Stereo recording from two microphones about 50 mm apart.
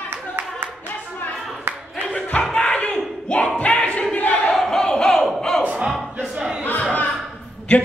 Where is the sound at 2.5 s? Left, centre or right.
Left.